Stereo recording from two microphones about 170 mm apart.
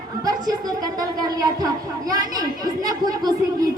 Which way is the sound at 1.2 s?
20° right (ahead or behind).